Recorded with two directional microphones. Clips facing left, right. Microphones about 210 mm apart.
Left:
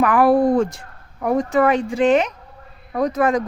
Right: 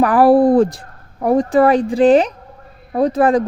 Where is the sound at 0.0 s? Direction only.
35° right (ahead or behind).